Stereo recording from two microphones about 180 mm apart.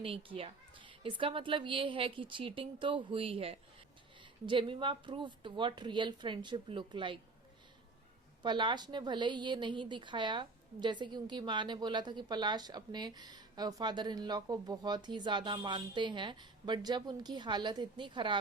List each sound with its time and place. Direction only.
0.0 s a woman's voice: 30° right (ahead or behind)
8.4 s a woman's voice: 25° right (ahead or behind)